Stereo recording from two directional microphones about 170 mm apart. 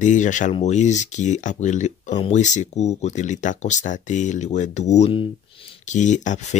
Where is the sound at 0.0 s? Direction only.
45° left (ahead or behind).